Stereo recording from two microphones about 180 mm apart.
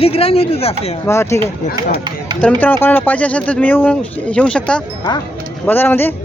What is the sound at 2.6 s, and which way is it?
Speech, 10° left (ahead or behind).